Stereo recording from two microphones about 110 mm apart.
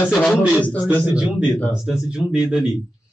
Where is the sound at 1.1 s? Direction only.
10° right (ahead or behind).